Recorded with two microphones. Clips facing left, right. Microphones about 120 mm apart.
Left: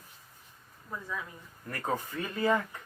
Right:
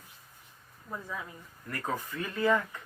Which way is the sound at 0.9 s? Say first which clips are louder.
Even; 20° right (ahead or behind).